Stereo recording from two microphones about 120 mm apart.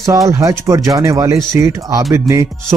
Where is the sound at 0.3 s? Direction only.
25° right (ahead or behind).